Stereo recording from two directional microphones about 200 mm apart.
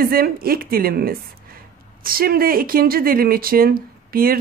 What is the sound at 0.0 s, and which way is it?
Speech, 50° right (ahead or behind).